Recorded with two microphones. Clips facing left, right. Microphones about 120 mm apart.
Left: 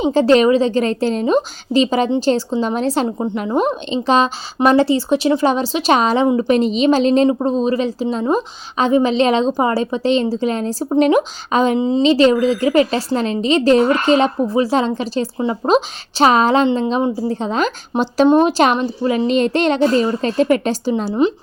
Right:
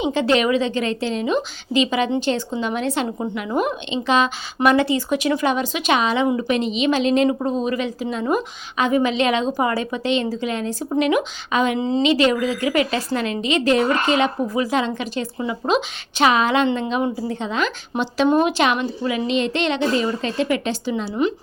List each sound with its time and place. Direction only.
0.0 s a woman's voice: 35° left (ahead or behind)
11.8 s a woman's voice: 20° left (ahead or behind)
12.0 s a woman's voice: 30° left (ahead or behind)